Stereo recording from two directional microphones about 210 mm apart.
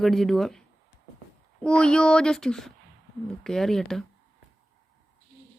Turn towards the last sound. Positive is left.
turn(degrees=0)  # may be behind; listen again after turning